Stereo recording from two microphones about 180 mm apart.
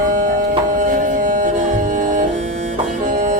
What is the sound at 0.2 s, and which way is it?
Music, 45° right (ahead or behind).